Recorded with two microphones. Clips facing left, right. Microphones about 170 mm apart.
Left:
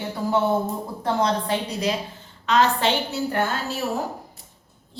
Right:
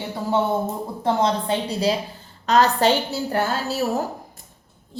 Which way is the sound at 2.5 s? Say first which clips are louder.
Right 3 dB; 40° right (ahead or behind).